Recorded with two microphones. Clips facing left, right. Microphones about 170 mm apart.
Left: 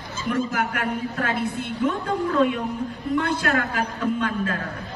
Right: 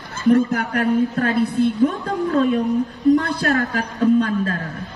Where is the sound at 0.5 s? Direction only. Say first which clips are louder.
Right 7 dB; 35° right (ahead or behind).